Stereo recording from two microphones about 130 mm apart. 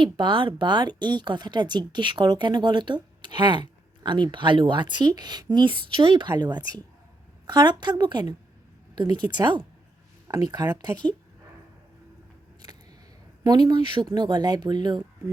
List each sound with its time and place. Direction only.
0.0 s speech: 40° right (ahead or behind)
13.4 s speech: 35° right (ahead or behind)